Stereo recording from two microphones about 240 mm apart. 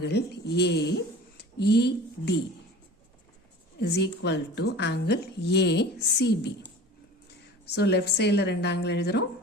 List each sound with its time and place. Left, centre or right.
0.0 s a woman's voice: left
3.8 s a woman's voice: left
7.8 s a woman's voice: left